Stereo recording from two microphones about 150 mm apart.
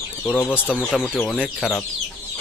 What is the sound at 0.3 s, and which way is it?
Speech, 10° left (ahead or behind).